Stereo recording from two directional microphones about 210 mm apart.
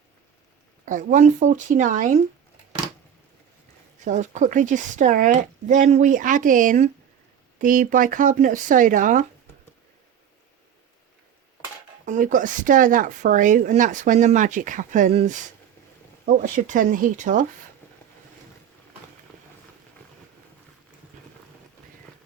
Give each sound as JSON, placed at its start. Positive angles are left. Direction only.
{"t": 0.9, "sound": "speech", "side_deg": -40}
{"t": 4.0, "sound": "speech", "side_deg": -35}
{"t": 12.0, "sound": "speech", "side_deg": -35}